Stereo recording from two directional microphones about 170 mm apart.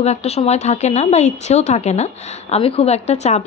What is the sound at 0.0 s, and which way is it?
A woman's voice, 40° left (ahead or behind).